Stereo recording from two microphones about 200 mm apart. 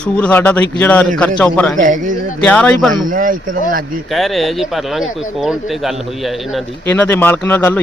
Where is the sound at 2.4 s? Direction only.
5° left (ahead or behind).